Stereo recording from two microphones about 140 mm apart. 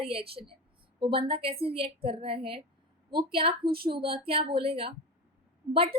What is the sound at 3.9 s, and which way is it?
A woman's voice, 40° right (ahead or behind).